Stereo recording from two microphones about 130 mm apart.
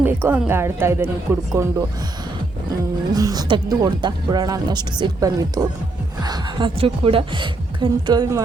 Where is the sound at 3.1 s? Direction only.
30° right (ahead or behind).